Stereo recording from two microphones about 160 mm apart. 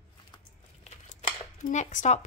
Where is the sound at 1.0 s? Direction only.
50° left (ahead or behind).